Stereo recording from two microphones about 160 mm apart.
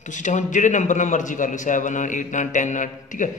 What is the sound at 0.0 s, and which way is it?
A man's voice, 50° left (ahead or behind).